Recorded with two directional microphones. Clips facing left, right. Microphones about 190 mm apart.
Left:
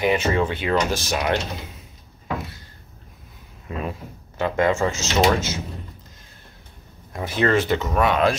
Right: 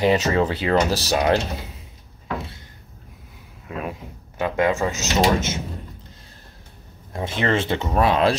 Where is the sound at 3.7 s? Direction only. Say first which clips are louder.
Even; 10° right (ahead or behind).